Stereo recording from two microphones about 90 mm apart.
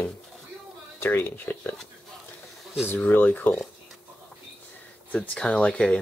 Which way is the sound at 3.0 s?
20° left (ahead or behind).